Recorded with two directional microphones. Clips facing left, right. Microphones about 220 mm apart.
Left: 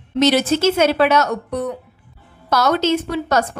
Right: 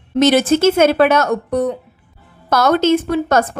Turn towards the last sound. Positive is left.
turn(degrees=-50)  # may be behind; listen again after turning